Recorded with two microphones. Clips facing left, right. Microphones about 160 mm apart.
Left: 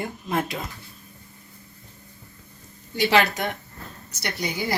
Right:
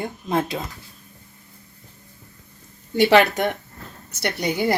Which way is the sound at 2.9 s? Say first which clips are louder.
Right 5 dB; 55° right (ahead or behind).